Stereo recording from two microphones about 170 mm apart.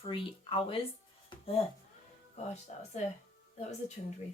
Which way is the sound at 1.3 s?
35° left (ahead or behind).